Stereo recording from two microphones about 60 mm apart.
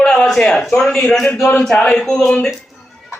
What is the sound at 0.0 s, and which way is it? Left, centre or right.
A man's voice, centre.